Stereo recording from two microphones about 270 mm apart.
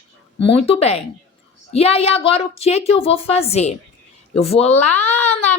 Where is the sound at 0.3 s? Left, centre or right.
Left.